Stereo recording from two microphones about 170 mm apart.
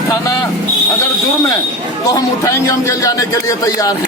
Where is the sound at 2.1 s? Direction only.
20° left (ahead or behind).